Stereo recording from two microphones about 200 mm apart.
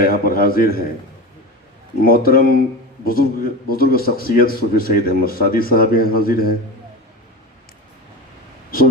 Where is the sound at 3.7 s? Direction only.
50° left (ahead or behind).